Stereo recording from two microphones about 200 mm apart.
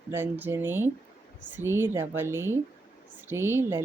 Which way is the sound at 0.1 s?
10° right (ahead or behind).